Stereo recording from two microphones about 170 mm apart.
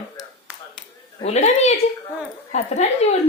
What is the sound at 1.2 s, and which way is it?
A woman's voice, 40° left (ahead or behind).